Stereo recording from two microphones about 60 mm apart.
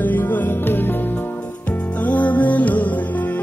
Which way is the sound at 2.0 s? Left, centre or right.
Left.